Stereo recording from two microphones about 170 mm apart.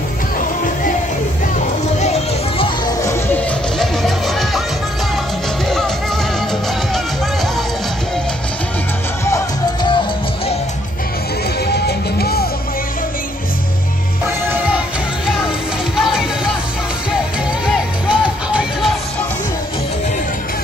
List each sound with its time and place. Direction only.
3.0 s music: 15° left (ahead or behind)
11.6 s music: 70° left (ahead or behind)
16.0 s music: 5° right (ahead or behind)
18.0 s music: 5° right (ahead or behind)